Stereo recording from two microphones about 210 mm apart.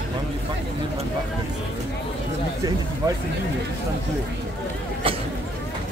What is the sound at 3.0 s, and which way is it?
Speech, 15° right (ahead or behind).